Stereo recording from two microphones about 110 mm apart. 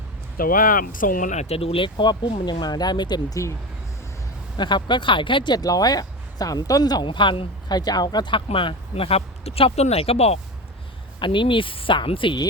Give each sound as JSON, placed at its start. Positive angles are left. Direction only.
{"t": 1.3, "sound": "speech", "side_deg": 80}
{"t": 4.5, "sound": "speech", "side_deg": 45}
{"t": 8.4, "sound": "speech", "side_deg": 55}
{"t": 11.2, "sound": "speech", "side_deg": 50}